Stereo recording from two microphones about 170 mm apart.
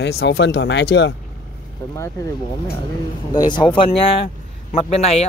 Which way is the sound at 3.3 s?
25° left (ahead or behind).